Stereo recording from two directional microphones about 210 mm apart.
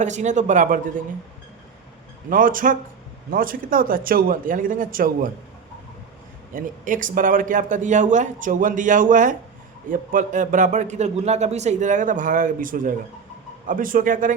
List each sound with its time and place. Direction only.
0.0 s a man's voice: 35° right (ahead or behind)
2.3 s a man's voice: 40° right (ahead or behind)
6.5 s a man's voice: 40° right (ahead or behind)